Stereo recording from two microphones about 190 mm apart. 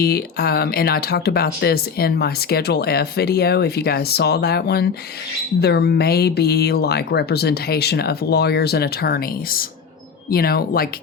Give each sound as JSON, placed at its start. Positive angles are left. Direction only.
{"t": 0.0, "sound": "speech", "side_deg": 55}